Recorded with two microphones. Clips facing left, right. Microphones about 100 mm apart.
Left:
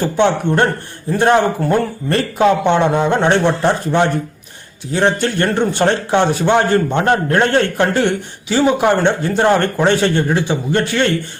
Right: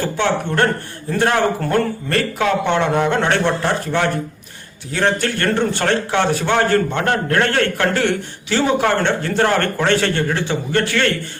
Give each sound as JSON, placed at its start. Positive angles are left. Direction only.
{"t": 0.0, "sound": "a man's voice", "side_deg": 20}